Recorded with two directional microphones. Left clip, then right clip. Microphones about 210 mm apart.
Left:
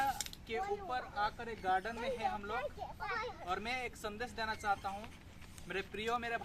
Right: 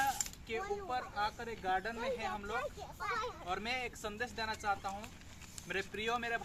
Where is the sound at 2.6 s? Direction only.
60° right (ahead or behind).